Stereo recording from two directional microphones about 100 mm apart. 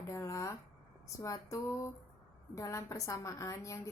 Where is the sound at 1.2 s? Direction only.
30° left (ahead or behind).